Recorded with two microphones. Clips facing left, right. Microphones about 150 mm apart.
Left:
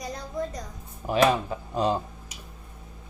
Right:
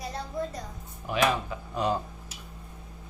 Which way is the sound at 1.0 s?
35° left (ahead or behind).